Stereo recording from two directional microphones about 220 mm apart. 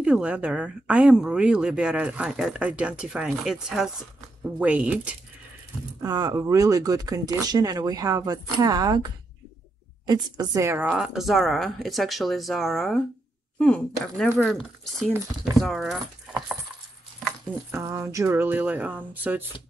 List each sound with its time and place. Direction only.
0.0 s speech: 5° right (ahead or behind)
6.0 s speech: 20° right (ahead or behind); by 16.0 s centre (ahead or behind)
17.6 s speech: 15° right (ahead or behind)